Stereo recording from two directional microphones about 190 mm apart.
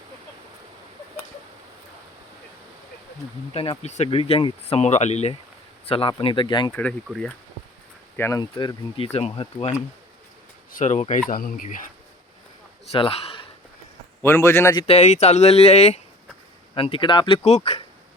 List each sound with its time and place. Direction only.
3.5 s speech: 30° left (ahead or behind)
6.7 s a man's voice: 10° left (ahead or behind); by 9.7 s 30° left (ahead or behind)
10.7 s speech: 40° left (ahead or behind)
12.9 s a man's voice: 30° left (ahead or behind)
14.2 s a man's voice: 10° left (ahead or behind)
14.8 s speech: 35° left (ahead or behind)